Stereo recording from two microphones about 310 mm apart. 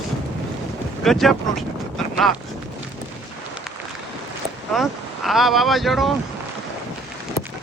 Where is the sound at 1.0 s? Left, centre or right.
Centre.